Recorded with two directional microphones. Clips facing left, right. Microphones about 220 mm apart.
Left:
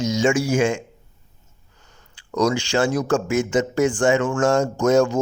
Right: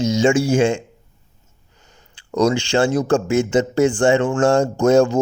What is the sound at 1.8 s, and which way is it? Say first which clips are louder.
Speech: right 2 dB; 25° right (ahead or behind).